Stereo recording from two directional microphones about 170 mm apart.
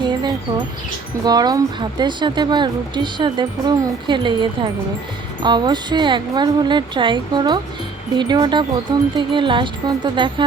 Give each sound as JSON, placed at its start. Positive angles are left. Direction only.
{"t": 0.1, "sound": "wind chime", "side_deg": -25}
{"t": 1.2, "sound": "speech", "side_deg": -25}